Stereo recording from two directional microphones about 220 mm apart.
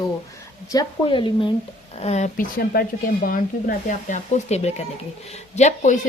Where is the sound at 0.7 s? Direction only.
20° left (ahead or behind).